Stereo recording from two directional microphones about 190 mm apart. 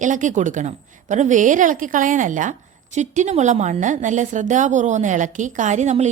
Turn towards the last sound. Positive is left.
turn(degrees=-40)  # may be behind; listen again after turning